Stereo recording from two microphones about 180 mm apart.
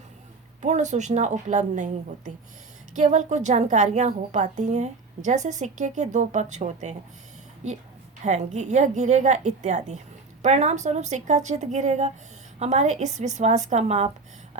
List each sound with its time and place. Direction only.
0.6 s a woman's voice: 40° right (ahead or behind)
8.2 s a woman's voice: 40° right (ahead or behind)
14.5 s a sound: 40° right (ahead or behind)